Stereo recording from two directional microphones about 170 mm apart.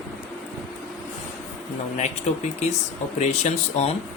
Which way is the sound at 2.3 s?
40° left (ahead or behind).